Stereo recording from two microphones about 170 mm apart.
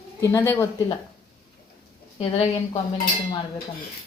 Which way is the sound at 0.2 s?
15° left (ahead or behind).